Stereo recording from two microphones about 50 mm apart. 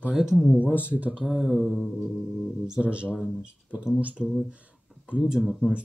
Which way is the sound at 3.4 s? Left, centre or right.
Centre.